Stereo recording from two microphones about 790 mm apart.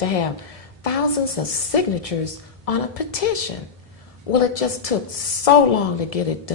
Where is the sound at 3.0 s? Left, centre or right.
Left.